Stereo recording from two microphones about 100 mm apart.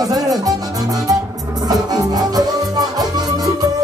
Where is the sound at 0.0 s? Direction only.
35° right (ahead or behind).